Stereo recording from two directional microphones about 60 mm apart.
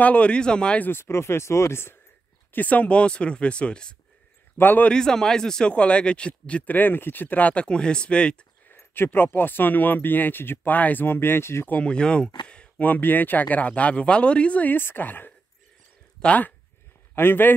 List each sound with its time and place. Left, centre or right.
0.0 s a man's voice: left
0.8 s speech: left
2.5 s speech: left
4.6 s speech: left
4.8 s a man's voice: centre
8.7 s speech: left
11.1 s speech: left
11.6 s speech: left
11.9 s speech: centre
12.8 s speech: left
14.8 s speech: left
17.1 s a man's voice: left